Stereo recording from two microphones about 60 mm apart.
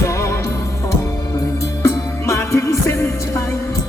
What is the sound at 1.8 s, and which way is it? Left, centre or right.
Music, left.